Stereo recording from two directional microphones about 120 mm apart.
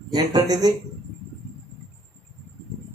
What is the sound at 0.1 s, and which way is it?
Speech, 35° right (ahead or behind).